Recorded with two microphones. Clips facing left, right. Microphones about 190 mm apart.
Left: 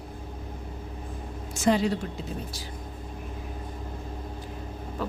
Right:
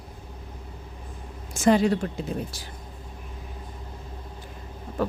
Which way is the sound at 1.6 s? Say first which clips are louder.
Right 4 dB; 55° right (ahead or behind).